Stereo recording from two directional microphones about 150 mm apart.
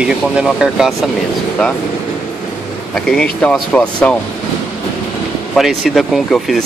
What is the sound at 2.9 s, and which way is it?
Speech, 5° left (ahead or behind).